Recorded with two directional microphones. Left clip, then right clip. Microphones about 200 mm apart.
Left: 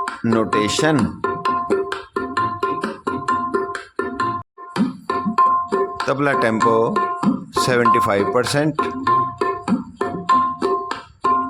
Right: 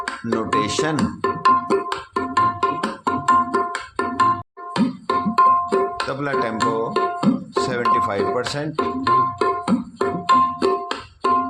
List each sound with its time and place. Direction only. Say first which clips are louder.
0.2 s speech: left 3 dB; 25° left (ahead or behind)
0.9 s music: left 1 dB; 25° right (ahead or behind)
6.1 s speech: left 6 dB; 30° left (ahead or behind)
6.9 s music: left 1 dB; 20° right (ahead or behind)
7.6 s speech: left 4 dB; 35° left (ahead or behind)
8.7 s music: even; 20° right (ahead or behind)